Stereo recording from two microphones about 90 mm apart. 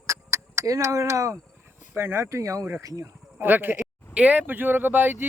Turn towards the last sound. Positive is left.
turn(degrees=-20)  # may be behind; listen again after turning